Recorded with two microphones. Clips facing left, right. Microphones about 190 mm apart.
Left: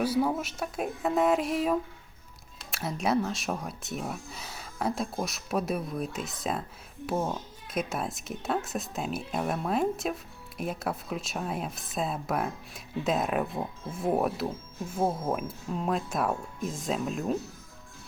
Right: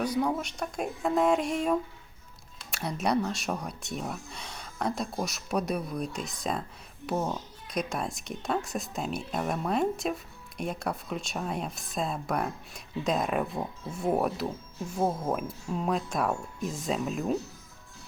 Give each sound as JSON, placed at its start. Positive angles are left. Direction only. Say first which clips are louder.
{"t": 0.0, "sound": "speech", "louder": "left 1 dB", "side_deg": 5}